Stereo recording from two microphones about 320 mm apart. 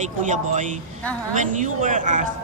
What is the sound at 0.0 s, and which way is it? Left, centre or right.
A man's voice, right.